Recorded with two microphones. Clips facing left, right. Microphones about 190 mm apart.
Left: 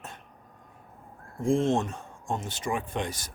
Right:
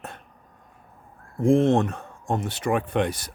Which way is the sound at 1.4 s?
60° right (ahead or behind).